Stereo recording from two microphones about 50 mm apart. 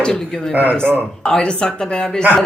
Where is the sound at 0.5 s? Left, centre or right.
Right.